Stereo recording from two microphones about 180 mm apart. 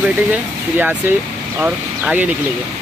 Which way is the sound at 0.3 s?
10° right (ahead or behind).